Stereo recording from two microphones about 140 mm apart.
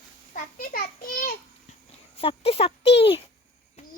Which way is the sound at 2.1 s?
40° left (ahead or behind).